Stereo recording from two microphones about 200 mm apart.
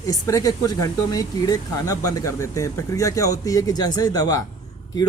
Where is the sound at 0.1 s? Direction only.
15° left (ahead or behind).